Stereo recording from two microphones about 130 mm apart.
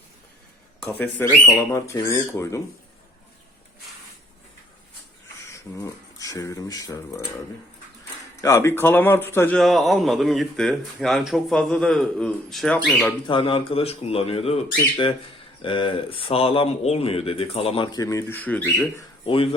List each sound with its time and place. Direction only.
0.9 s speech: 15° left (ahead or behind)
5.5 s speech: 25° left (ahead or behind)
8.4 s a man's voice: 25° left (ahead or behind)
9.6 s speech: centre (ahead or behind)
13.2 s speech: 40° left (ahead or behind)
17.9 s a man's voice: 25° left (ahead or behind)
19.2 s speech: 45° left (ahead or behind)